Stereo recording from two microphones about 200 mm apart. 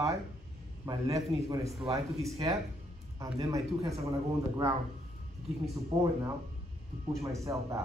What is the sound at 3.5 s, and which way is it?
Speech, 15° right (ahead or behind).